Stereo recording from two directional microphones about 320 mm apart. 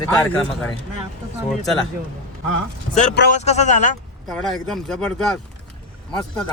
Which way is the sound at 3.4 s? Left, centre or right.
Left.